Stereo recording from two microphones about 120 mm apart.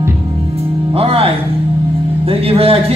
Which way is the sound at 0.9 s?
55° right (ahead or behind).